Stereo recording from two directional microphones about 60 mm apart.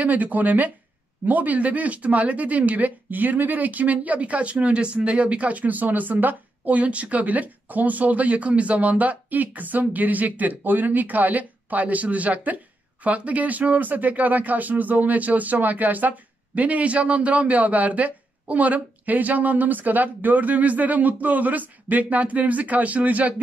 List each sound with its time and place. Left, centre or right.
0.0 s speech: right